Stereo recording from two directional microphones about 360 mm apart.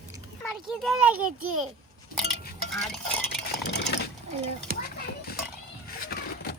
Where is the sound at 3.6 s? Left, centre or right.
Left.